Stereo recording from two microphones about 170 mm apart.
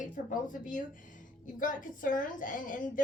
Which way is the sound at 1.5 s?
50° left (ahead or behind).